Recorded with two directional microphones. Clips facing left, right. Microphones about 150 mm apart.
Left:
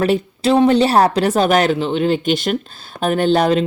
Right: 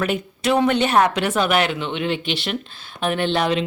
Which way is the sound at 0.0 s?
30° left (ahead or behind).